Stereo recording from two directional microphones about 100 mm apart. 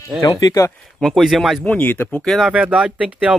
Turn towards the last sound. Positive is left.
turn(degrees=-10)  # may be behind; listen again after turning